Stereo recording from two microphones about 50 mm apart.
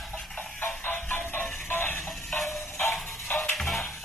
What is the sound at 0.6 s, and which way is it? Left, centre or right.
Music, left.